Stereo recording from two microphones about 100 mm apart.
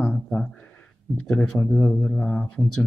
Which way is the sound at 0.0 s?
10° left (ahead or behind).